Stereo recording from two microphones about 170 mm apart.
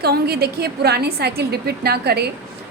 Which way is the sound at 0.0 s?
70° right (ahead or behind).